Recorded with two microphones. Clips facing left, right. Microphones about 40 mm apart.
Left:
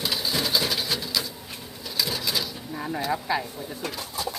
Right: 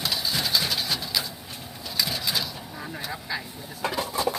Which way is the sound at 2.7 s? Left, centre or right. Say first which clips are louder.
Left 8 dB; centre.